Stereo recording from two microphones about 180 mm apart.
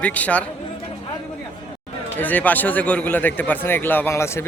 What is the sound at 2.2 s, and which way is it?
A man's voice, 10° left (ahead or behind).